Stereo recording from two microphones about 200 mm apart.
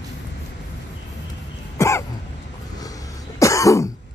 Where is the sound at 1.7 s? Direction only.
15° left (ahead or behind).